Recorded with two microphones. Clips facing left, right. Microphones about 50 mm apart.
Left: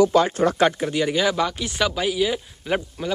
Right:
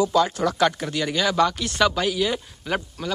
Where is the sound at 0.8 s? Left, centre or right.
Centre.